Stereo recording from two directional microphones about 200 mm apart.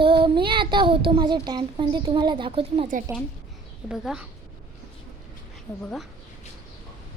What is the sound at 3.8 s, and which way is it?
Speech, centre (ahead or behind).